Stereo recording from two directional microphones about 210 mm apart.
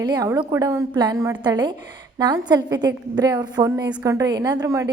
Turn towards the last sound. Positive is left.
turn(degrees=-15)  # may be behind; listen again after turning